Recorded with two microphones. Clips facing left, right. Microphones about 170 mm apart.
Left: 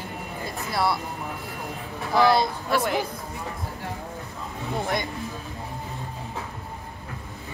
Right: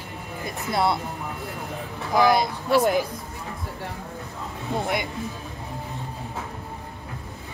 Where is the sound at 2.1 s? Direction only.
20° right (ahead or behind).